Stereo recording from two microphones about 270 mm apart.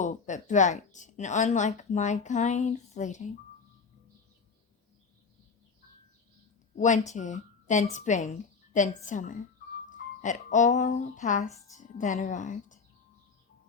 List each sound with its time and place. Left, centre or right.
0.0 s a woman's voice: left
6.7 s a woman's voice: left